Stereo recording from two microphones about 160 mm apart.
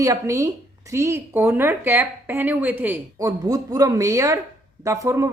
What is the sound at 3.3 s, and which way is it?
A woman's voice, 20° right (ahead or behind).